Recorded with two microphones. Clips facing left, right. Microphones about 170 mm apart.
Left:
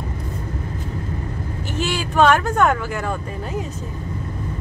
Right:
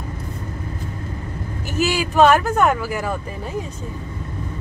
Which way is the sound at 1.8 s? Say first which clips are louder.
Right 2 dB; 5° right (ahead or behind).